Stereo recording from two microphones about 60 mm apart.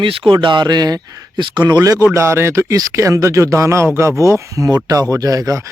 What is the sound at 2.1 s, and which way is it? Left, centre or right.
Speech, right.